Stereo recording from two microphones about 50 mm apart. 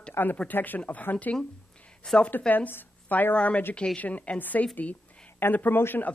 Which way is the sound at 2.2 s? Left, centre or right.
Left.